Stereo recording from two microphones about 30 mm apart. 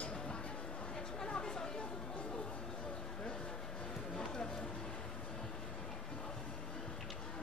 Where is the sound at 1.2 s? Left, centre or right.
Left.